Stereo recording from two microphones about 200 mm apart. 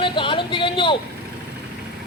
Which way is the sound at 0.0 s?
25° left (ahead or behind).